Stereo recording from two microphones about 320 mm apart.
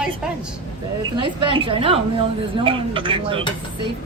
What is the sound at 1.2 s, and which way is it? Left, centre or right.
A woman's voice, centre.